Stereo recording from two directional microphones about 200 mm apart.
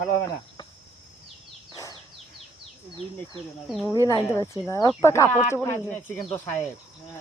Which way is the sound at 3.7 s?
Centre (ahead or behind).